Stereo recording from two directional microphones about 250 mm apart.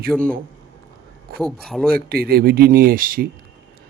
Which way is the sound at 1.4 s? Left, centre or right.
Centre.